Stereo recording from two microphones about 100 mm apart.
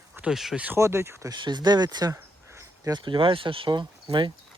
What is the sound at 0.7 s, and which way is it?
Speech, 30° right (ahead or behind).